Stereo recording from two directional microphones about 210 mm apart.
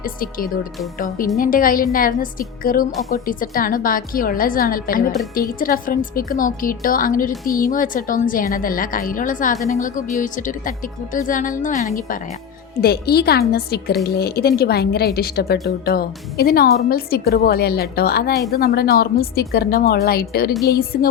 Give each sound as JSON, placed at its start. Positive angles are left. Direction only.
{"t": 0.0, "sound": "speech", "side_deg": 45}